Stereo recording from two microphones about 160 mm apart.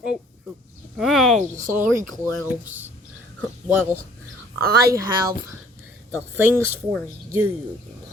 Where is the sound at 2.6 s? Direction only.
10° right (ahead or behind).